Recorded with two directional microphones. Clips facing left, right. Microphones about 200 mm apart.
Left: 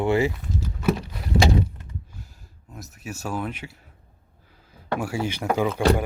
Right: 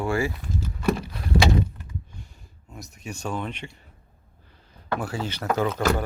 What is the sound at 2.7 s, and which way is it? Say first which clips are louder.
Speech: left 1 dB; 5° left (ahead or behind).